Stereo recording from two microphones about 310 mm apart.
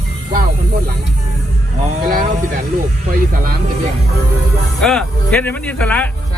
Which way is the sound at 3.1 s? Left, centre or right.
Right.